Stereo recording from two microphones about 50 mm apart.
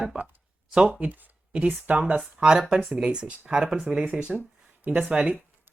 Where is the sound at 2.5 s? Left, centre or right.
Centre.